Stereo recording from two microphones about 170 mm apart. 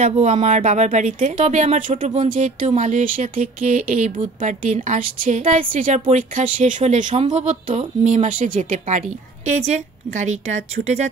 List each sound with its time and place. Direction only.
0.0 s speech: 45° right (ahead or behind)